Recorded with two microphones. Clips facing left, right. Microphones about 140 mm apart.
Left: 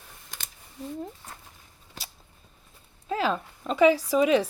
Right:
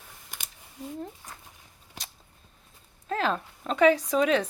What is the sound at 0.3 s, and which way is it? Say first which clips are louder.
Scissors: even; 15° right (ahead or behind).